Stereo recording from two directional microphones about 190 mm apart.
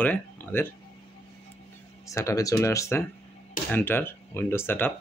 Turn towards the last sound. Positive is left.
turn(degrees=10)  # may be behind; listen again after turning